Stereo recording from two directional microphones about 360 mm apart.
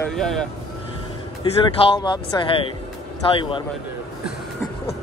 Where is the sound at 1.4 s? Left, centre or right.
Centre.